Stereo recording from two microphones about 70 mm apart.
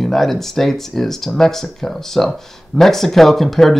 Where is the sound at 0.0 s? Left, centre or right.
Centre.